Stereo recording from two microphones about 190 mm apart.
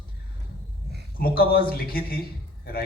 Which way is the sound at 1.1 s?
50° left (ahead or behind).